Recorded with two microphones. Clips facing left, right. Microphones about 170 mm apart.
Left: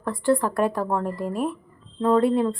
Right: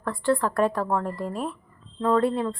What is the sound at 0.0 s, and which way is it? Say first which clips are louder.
A woman's voice: left 2 dB; 10° left (ahead or behind).